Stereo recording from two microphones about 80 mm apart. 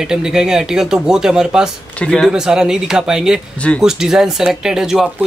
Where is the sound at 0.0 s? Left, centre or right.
Centre.